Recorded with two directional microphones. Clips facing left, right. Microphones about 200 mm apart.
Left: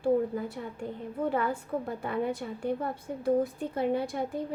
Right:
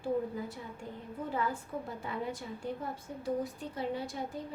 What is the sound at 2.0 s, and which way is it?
A woman's voice, 60° left (ahead or behind).